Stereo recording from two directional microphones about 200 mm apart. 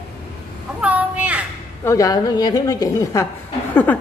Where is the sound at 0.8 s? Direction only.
5° right (ahead or behind).